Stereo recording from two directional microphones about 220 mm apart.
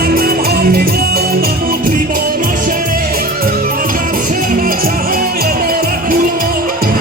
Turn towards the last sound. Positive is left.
turn(degrees=-40)  # may be behind; listen again after turning